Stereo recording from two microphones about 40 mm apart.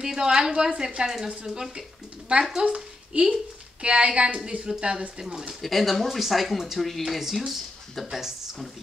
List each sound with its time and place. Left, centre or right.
0.0 s a woman's voice: centre
5.6 s speech: centre